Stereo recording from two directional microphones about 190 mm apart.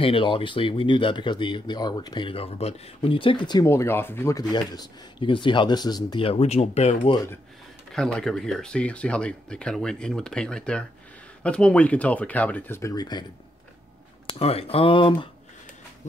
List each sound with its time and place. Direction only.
0.0 s speech: 25° left (ahead or behind)
7.9 s speech: 5° left (ahead or behind); by 13.2 s 20° left (ahead or behind)
14.2 s speech: 30° left (ahead or behind)